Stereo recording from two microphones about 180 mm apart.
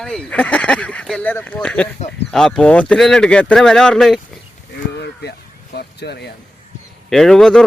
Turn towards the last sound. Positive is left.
turn(degrees=5)  # may be behind; listen again after turning